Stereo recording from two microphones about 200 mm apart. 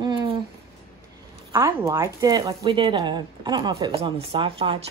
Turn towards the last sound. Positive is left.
turn(degrees=-25)  # may be behind; listen again after turning